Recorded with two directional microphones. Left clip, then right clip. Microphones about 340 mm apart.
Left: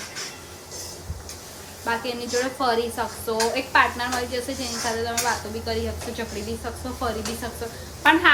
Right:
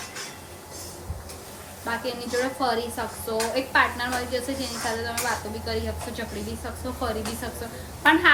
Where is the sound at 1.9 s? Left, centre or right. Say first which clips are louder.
Left 3 dB; centre.